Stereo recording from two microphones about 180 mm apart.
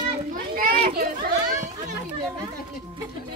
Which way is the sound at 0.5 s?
55° right (ahead or behind).